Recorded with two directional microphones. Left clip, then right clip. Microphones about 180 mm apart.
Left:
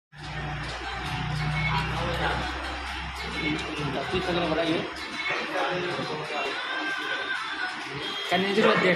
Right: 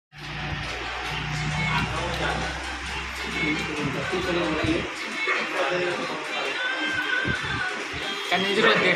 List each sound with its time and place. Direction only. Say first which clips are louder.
8.3 s speech: right 2 dB; 55° left (ahead or behind)